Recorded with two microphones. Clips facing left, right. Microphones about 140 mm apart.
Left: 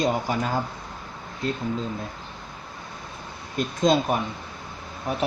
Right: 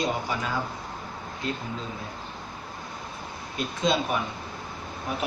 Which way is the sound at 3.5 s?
45° left (ahead or behind).